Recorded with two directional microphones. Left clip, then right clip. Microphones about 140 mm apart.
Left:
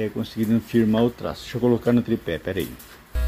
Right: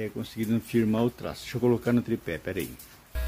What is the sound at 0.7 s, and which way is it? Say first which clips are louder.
Speech: left 5 dB; 40° right (ahead or behind).